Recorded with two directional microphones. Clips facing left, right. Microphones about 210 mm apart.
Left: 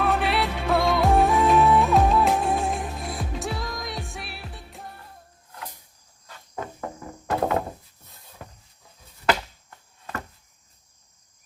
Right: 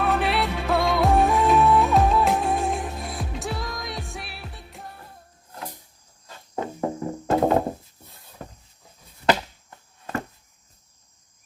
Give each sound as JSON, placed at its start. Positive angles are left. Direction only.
{"t": 0.0, "sound": "music", "side_deg": 0}
{"t": 6.8, "sound": "music", "side_deg": -25}
{"t": 9.6, "sound": "a sound", "side_deg": -25}